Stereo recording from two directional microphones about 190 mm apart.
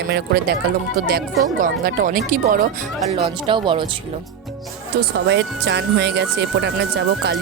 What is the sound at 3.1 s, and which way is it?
Speech, 30° right (ahead or behind).